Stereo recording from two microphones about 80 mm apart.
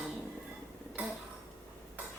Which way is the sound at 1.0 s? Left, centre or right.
Right.